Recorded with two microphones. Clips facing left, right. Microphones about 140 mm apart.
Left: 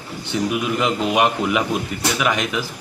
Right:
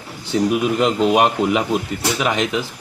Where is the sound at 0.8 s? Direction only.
35° right (ahead or behind).